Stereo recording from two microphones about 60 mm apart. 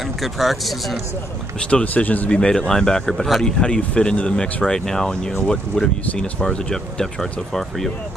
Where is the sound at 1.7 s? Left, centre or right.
Left.